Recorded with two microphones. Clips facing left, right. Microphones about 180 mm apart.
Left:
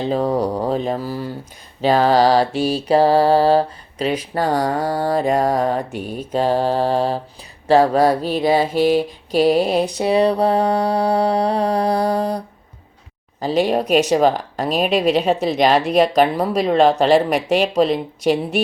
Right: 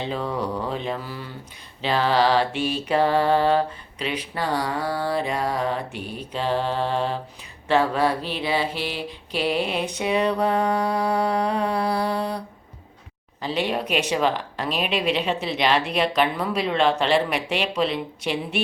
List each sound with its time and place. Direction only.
0.0 s mantra: 40° left (ahead or behind)
13.4 s mantra: 40° left (ahead or behind)